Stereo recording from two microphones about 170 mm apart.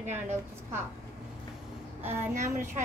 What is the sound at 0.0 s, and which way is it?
Speech, 45° right (ahead or behind).